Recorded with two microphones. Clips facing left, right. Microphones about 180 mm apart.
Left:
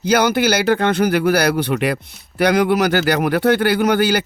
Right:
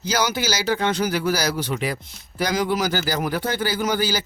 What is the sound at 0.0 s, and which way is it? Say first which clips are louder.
Speech: left 8 dB; 60° left (ahead or behind).